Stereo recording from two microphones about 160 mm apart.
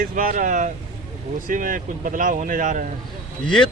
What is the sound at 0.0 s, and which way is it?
Speech, 60° right (ahead or behind).